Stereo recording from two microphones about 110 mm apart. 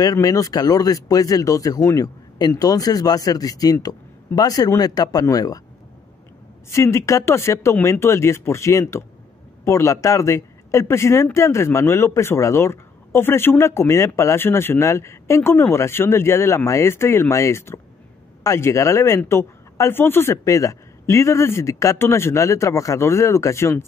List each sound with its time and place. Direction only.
0.0 s speech: 35° left (ahead or behind)
6.7 s a man's voice: 25° left (ahead or behind)